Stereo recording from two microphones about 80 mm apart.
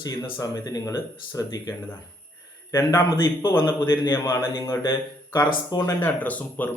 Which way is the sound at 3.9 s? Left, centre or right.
Left.